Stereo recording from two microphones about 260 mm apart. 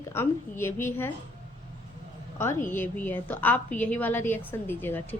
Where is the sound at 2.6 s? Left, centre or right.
Centre.